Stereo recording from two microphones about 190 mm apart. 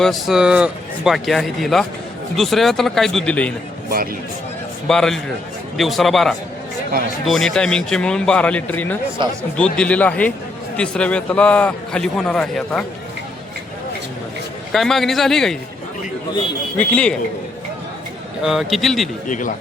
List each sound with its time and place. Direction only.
0.0 s a man's voice: centre (ahead or behind)
3.8 s speech: 50° right (ahead or behind)
4.9 s a man's voice: centre (ahead or behind)
9.2 s speech: 25° right (ahead or behind)
9.7 s a man's voice: 5° left (ahead or behind)
14.7 s a man's voice: centre (ahead or behind)
16.7 s speech: 5° left (ahead or behind)
18.4 s a man's voice: centre (ahead or behind)
19.3 s speech: 45° left (ahead or behind)